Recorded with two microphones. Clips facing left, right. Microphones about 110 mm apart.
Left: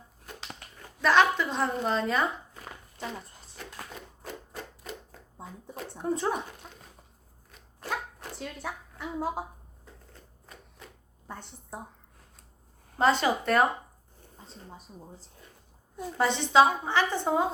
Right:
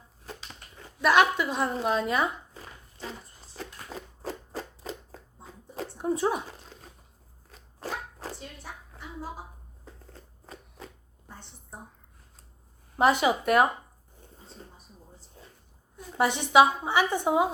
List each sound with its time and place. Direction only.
0.3 s a sound: 30° right (ahead or behind)
1.0 s a woman's voice: 10° right (ahead or behind)
2.6 s a sound: 60° left (ahead or behind)
3.8 s a sound: 35° right (ahead or behind)
6.0 s speech: 10° right (ahead or behind)
8.4 s a woman's voice: 70° left (ahead or behind)
9.8 s scissors: 35° right (ahead or behind)
13.0 s a woman's voice: 15° right (ahead or behind)
16.1 s a woman's voice: 15° right (ahead or behind)